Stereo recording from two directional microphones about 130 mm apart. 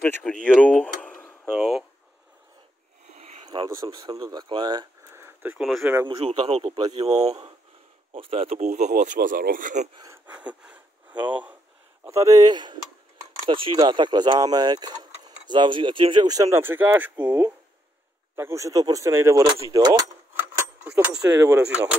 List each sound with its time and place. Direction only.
0.0 s speech: 10° left (ahead or behind)
0.6 s a sound: 10° left (ahead or behind)
1.6 s speech: centre (ahead or behind)
3.1 s a sound: 55° right (ahead or behind)
3.4 s speech: 30° right (ahead or behind)
5.1 s a sound: 15° right (ahead or behind)
5.6 s speech: centre (ahead or behind)
6.0 s speech: 40° right (ahead or behind); by 9.8 s 90° right
10.1 s a sound: 10° right (ahead or behind)
12.0 s speech: 25° right (ahead or behind)
13.7 s speech: 35° right (ahead or behind)
20.3 s keys jangling: 15° right (ahead or behind)
21.2 s speech: 25° right (ahead or behind)